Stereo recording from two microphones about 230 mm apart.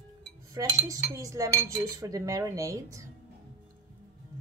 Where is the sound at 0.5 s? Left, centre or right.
Centre.